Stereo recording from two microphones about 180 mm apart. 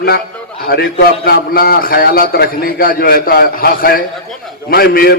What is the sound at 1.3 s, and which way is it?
A man's voice, 60° left (ahead or behind).